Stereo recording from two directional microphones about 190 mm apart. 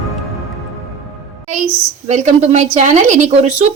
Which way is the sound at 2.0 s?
35° right (ahead or behind).